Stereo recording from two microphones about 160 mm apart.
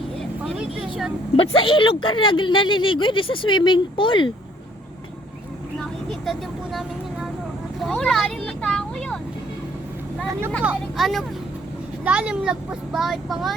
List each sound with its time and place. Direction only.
0.2 s vehicle: 5° right (ahead or behind)
1.4 s speech: 35° left (ahead or behind)
7.8 s vehicle: centre (ahead or behind)
10.6 s speech: 5° right (ahead or behind)